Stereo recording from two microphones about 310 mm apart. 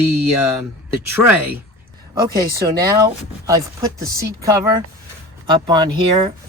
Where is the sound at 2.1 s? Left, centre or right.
Centre.